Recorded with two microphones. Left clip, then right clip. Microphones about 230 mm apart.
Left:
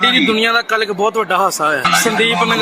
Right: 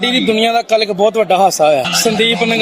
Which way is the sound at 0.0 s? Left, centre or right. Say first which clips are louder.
Left 1 dB; right.